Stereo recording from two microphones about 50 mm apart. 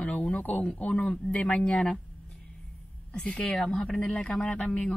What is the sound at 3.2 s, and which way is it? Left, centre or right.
A man's voice, left.